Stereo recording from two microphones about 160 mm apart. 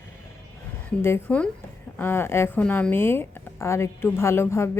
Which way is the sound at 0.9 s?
10° left (ahead or behind).